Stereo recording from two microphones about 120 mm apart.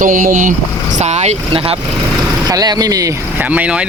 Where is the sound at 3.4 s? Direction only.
10° right (ahead or behind).